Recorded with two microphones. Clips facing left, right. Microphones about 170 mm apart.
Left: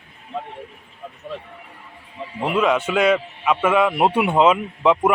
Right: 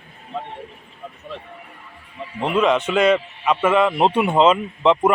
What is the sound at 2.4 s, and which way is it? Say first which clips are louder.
A man's voice: right 1 dB; 5° left (ahead or behind).